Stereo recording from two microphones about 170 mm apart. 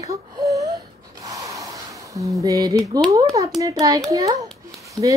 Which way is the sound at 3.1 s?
20° right (ahead or behind).